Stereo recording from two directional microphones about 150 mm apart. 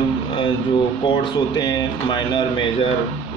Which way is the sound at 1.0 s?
30° left (ahead or behind).